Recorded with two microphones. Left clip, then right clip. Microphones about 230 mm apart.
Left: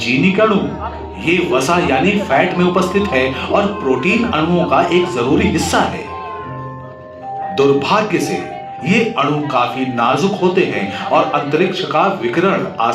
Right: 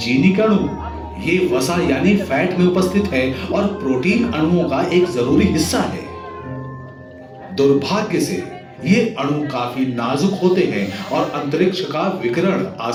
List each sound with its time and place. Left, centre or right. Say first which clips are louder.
0.0 s speech: left 3 dB; centre
7.5 s speech: left 3 dB; centre